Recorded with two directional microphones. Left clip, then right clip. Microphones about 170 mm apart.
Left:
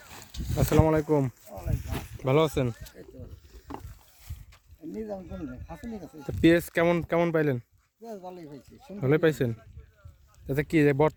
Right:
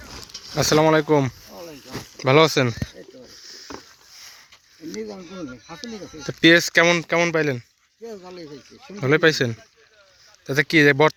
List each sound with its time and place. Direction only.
0.5 s speech: centre (ahead or behind)
6.2 s speech: 5° left (ahead or behind)
8.0 s speech: 55° left (ahead or behind)
9.0 s speech: 10° left (ahead or behind)